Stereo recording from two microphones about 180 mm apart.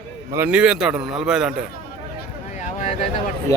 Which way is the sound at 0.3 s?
5° right (ahead or behind).